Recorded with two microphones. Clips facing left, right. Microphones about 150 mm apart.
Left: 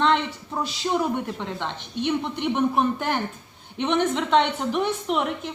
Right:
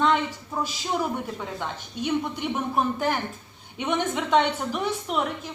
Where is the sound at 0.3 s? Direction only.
45° right (ahead or behind).